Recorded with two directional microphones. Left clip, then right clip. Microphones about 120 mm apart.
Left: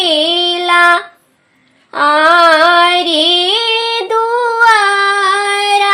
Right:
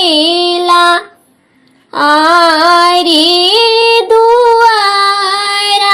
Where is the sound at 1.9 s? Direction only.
30° right (ahead or behind).